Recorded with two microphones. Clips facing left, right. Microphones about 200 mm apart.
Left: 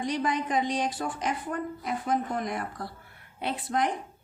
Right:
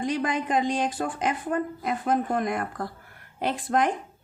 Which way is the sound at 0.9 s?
55° right (ahead or behind).